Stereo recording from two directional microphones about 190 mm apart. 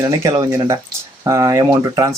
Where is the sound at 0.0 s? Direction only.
15° right (ahead or behind).